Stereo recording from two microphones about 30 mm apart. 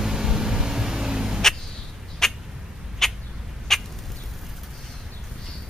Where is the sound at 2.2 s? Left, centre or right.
Centre.